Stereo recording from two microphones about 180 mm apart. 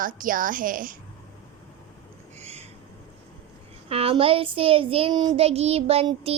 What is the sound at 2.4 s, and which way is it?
Owl, 35° right (ahead or behind).